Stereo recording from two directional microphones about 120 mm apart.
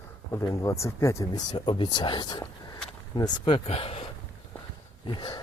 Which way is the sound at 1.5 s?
40° left (ahead or behind).